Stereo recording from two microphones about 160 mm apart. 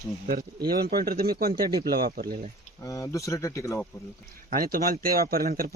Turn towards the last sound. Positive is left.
turn(degrees=-65)  # may be behind; listen again after turning